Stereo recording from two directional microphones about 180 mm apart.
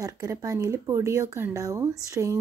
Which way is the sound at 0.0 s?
20° right (ahead or behind).